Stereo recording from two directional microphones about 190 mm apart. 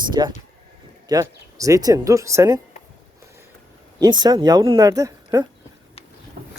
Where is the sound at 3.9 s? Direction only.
20° right (ahead or behind).